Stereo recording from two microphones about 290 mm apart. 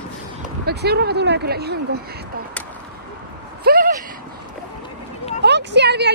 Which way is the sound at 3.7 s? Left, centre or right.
Right.